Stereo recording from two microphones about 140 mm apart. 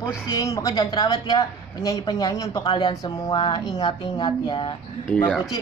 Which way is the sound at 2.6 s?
35° left (ahead or behind).